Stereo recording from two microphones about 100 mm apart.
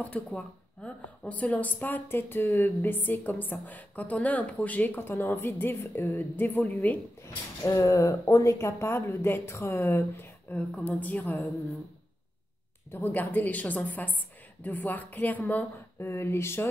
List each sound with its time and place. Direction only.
0.0 s a woman's voice: 10° left (ahead or behind)
7.6 s a woman's voice: 30° left (ahead or behind); by 11.3 s 15° left (ahead or behind)
12.9 s a woman's voice: 20° left (ahead or behind)